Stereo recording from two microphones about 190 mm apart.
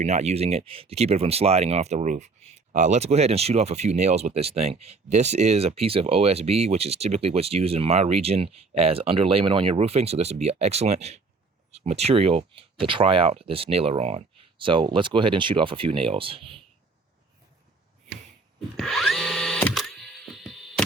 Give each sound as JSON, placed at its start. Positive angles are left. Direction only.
{"t": 0.0, "sound": "speech", "side_deg": -35}
{"t": 18.8, "sound": "drill", "side_deg": 0}